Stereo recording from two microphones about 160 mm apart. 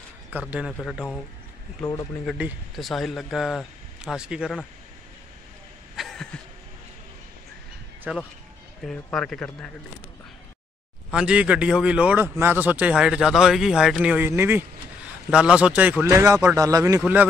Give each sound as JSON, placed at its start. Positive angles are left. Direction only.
{"t": 0.3, "sound": "a man's voice", "side_deg": -10}
{"t": 0.7, "sound": "speech", "side_deg": 5}
{"t": 2.3, "sound": "speech", "side_deg": -5}
{"t": 5.9, "sound": "a sound", "side_deg": 0}
{"t": 8.1, "sound": "a man's voice", "side_deg": -10}
{"t": 8.8, "sound": "speech", "side_deg": 0}
{"t": 11.1, "sound": "a man's voice", "side_deg": -5}
{"t": 17.0, "sound": "a man's voice", "side_deg": -10}